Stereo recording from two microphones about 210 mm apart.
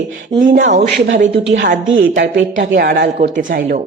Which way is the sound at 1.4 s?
55° right (ahead or behind).